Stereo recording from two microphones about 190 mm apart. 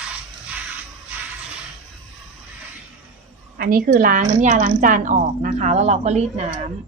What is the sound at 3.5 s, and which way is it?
A woman's voice, 50° right (ahead or behind).